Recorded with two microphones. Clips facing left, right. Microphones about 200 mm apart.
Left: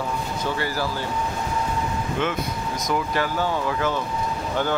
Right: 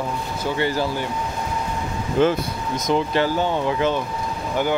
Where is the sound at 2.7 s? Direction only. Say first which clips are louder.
Right 5 dB; 25° right (ahead or behind).